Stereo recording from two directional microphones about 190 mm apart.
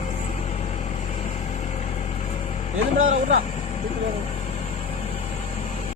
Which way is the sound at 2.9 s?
90° right.